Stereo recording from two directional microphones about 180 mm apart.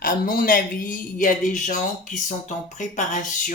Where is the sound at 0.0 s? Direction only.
50° left (ahead or behind).